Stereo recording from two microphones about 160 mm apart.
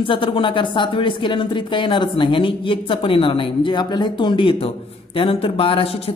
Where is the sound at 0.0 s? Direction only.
30° left (ahead or behind).